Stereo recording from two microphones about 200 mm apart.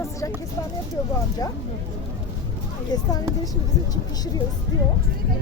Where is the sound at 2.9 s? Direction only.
20° left (ahead or behind).